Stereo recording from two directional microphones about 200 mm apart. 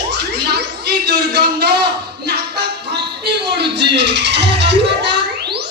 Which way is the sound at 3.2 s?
55° right (ahead or behind).